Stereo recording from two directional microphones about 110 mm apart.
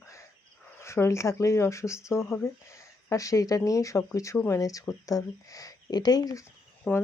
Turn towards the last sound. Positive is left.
turn(degrees=15)  # may be behind; listen again after turning